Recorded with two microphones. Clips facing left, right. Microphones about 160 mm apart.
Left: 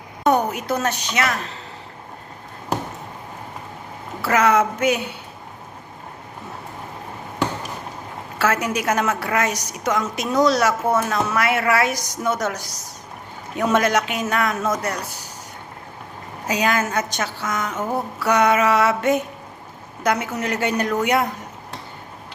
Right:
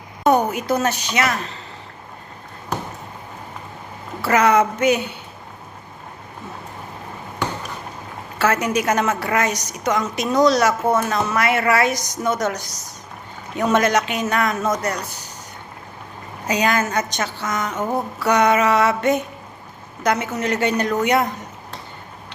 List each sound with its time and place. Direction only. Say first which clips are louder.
0.3 s a woman's voice: right 2 dB; centre (ahead or behind)
4.2 s a woman's voice: right 1 dB; centre (ahead or behind)
8.4 s a woman's voice: right 2 dB; 5° left (ahead or behind)
16.5 s a woman's voice: right 1 dB; 5° left (ahead or behind)